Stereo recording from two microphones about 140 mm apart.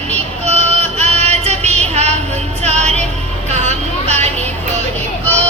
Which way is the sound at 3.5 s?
50° right (ahead or behind).